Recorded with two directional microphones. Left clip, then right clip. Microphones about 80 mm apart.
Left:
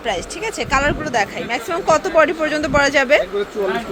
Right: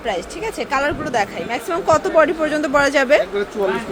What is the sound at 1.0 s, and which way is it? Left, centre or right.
Speech, centre.